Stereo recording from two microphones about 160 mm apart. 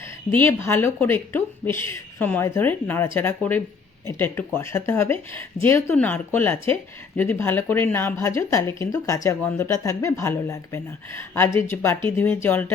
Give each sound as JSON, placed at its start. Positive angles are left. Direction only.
{"t": 0.0, "sound": "speech", "side_deg": 15}